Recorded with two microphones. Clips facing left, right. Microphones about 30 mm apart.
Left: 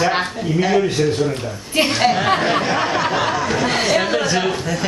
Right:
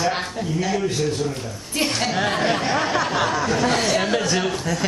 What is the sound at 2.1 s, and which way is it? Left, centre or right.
Speech, centre.